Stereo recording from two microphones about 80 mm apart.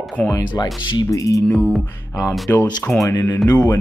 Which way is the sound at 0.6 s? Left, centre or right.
Left.